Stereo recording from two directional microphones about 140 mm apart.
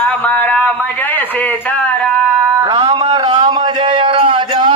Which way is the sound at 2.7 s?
35° right (ahead or behind).